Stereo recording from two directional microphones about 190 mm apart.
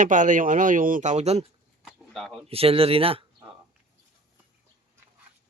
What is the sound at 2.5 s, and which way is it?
Speech, 30° right (ahead or behind).